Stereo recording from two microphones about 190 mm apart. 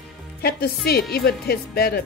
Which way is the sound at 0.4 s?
55° left (ahead or behind).